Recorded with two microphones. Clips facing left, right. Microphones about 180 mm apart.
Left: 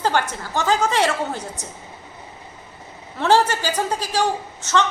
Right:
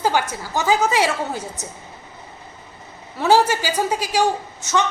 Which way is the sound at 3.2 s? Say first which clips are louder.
Right 1 dB; 10° right (ahead or behind).